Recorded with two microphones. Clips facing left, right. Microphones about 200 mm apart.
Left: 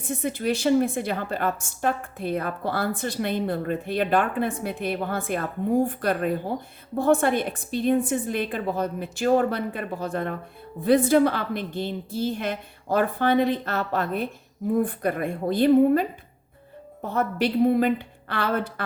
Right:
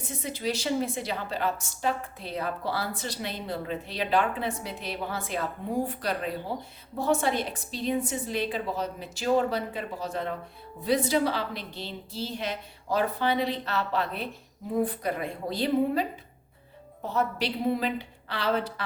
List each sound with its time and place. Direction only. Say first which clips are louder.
0.0 s a woman's voice: left 5 dB; 55° left (ahead or behind)